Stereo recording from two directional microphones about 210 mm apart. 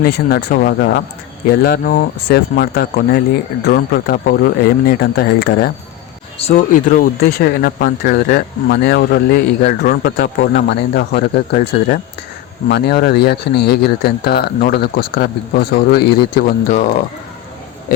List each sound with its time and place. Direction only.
0.0 s speech: 50° left (ahead or behind)
6.4 s speech: 35° left (ahead or behind)